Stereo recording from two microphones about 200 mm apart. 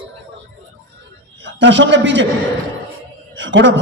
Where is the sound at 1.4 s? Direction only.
65° right (ahead or behind).